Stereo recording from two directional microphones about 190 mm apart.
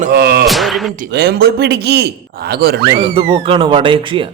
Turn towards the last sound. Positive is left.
turn(degrees=-25)  # may be behind; listen again after turning